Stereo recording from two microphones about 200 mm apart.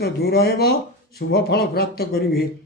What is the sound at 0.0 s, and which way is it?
Speech, 50° left (ahead or behind).